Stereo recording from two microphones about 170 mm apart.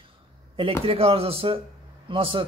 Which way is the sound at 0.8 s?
35° right (ahead or behind).